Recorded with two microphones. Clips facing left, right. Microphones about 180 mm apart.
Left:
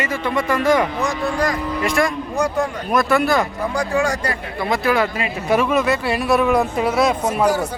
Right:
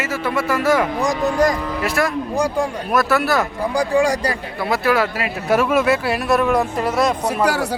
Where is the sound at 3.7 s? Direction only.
35° right (ahead or behind).